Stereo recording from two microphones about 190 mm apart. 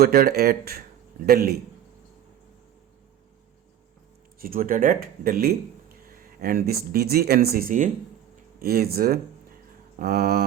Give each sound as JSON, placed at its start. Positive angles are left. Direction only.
{"t": 0.0, "sound": "speech", "side_deg": -50}
{"t": 4.4, "sound": "speech", "side_deg": -50}